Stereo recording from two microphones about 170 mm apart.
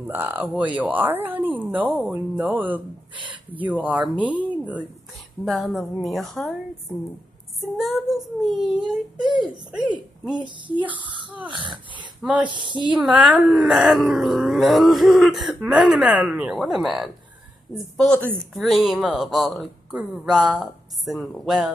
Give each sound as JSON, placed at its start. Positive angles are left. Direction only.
{"t": 0.0, "sound": "speech", "side_deg": -10}
{"t": 3.8, "sound": "speech", "side_deg": -10}
{"t": 5.4, "sound": "wail", "side_deg": 0}
{"t": 7.7, "sound": "wail", "side_deg": 0}
{"t": 11.0, "sound": "speech", "side_deg": -30}
{"t": 12.9, "sound": "wail", "side_deg": -5}